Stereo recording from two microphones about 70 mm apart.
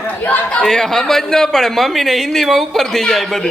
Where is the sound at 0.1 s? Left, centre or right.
Left.